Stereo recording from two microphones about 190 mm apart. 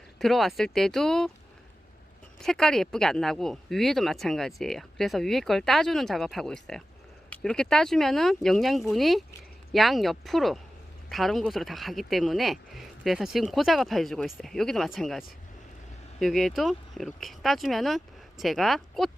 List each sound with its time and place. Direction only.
0.2 s speech: centre (ahead or behind)
2.4 s speech: 5° left (ahead or behind)
16.2 s speech: centre (ahead or behind)